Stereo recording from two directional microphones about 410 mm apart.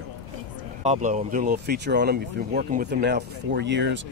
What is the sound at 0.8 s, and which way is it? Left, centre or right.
Speech, centre.